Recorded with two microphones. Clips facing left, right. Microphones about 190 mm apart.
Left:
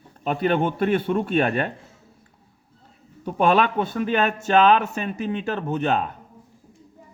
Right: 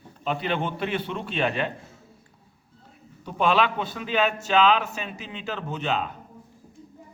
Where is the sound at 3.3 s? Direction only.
50° left (ahead or behind).